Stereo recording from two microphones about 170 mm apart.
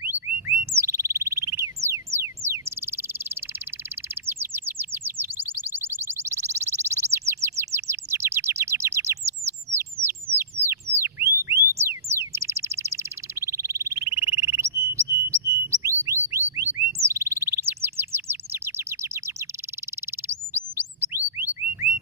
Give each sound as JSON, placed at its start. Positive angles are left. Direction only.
{"t": 0.7, "sound": "bird", "side_deg": -15}
{"t": 2.1, "sound": "a sound", "side_deg": -15}
{"t": 4.1, "sound": "chirp", "side_deg": -15}
{"t": 9.8, "sound": "bird", "side_deg": -15}